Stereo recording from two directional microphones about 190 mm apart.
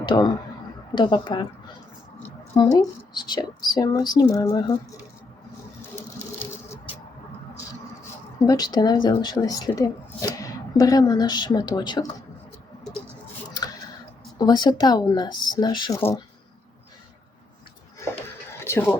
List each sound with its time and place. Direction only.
0.0 s speech: 25° left (ahead or behind)
2.7 s speech: 20° left (ahead or behind)
6.0 s sewing machine: 10° left (ahead or behind)
8.4 s speech: 20° left (ahead or behind)
14.3 s speech: 20° left (ahead or behind)
16.0 s speech: 10° left (ahead or behind)
18.6 s a sound: 15° left (ahead or behind)